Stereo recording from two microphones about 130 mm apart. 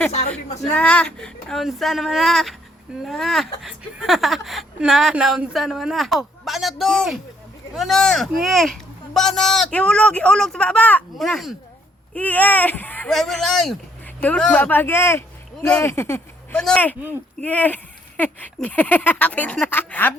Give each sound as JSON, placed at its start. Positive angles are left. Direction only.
{"t": 0.4, "sound": "speech", "side_deg": 60}
{"t": 0.7, "sound": "a woman's voice", "side_deg": 10}
{"t": 12.1, "sound": "speech", "side_deg": 10}
{"t": 13.1, "sound": "a woman's voice", "side_deg": 0}
{"t": 16.6, "sound": "speech", "side_deg": 5}